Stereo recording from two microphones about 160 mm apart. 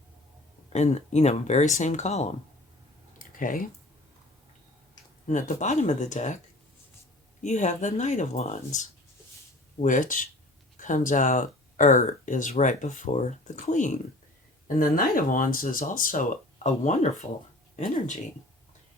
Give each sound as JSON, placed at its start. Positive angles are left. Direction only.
{"t": 0.7, "sound": "speech", "side_deg": 45}
{"t": 3.2, "sound": "a sound", "side_deg": 55}
{"t": 5.3, "sound": "speech", "side_deg": 50}
{"t": 7.4, "sound": "speech", "side_deg": 50}
{"t": 14.8, "sound": "speech", "side_deg": 60}